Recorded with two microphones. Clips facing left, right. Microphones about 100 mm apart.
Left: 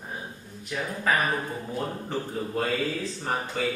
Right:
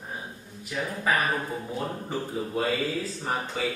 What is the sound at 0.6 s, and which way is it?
Speech, 5° right (ahead or behind).